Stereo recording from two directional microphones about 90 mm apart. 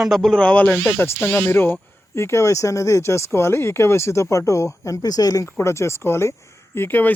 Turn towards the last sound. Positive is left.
turn(degrees=20)  # may be behind; listen again after turning